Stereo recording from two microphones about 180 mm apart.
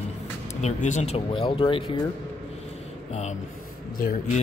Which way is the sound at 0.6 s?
40° left (ahead or behind).